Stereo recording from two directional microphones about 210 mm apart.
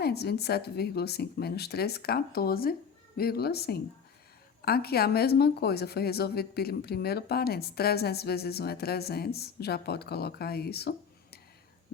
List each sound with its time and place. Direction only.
0.0 s speech: 50° left (ahead or behind)